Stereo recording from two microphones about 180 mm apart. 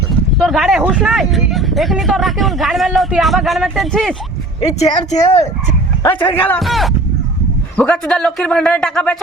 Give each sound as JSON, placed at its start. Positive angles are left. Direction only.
{"t": 0.3, "sound": "speech", "side_deg": 0}
{"t": 4.8, "sound": "speech", "side_deg": 35}
{"t": 6.0, "sound": "speech", "side_deg": 10}